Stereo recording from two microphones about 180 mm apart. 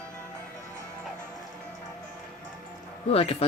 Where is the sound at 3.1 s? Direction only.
35° left (ahead or behind).